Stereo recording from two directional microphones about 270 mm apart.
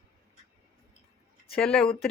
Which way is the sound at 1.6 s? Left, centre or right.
Centre.